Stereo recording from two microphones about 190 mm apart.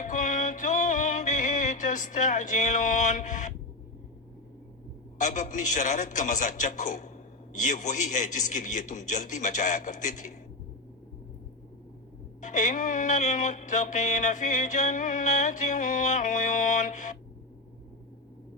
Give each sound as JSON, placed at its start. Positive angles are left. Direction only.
{"t": 0.0, "sound": "music", "side_deg": 40}
{"t": 5.1, "sound": "music", "side_deg": 40}
{"t": 12.4, "sound": "music", "side_deg": 40}